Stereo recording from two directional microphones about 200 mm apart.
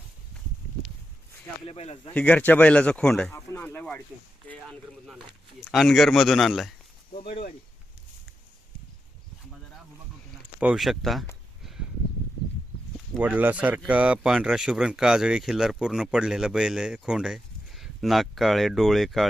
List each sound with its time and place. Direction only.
1.6 s speech: 30° left (ahead or behind)
2.1 s speech: 5° left (ahead or behind)
10.6 s speech: 5° right (ahead or behind)
13.1 s speech: 10° right (ahead or behind)